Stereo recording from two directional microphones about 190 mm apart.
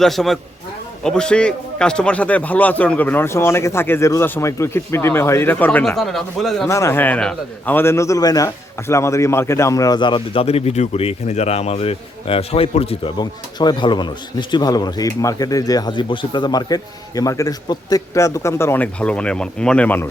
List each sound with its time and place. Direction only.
0.0 s a man's voice: centre (ahead or behind)
6.7 s a man's voice: 15° left (ahead or behind)